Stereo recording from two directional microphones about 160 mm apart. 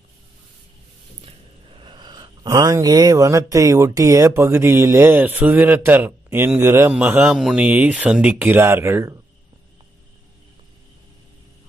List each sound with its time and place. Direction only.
1.2 s speech: 35° right (ahead or behind); by 9.2 s 15° right (ahead or behind)